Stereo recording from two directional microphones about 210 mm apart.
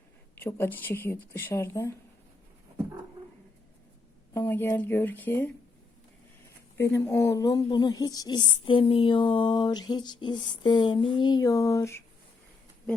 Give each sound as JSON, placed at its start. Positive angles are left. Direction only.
{"t": 0.3, "sound": "speech", "side_deg": 10}
{"t": 4.4, "sound": "speech", "side_deg": 10}
{"t": 6.7, "sound": "speech", "side_deg": 10}